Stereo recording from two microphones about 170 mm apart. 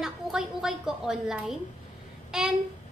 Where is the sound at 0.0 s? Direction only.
Centre (ahead or behind).